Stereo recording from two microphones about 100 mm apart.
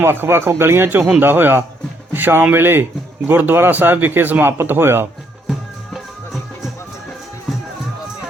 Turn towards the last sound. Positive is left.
turn(degrees=0)  # may be behind; listen again after turning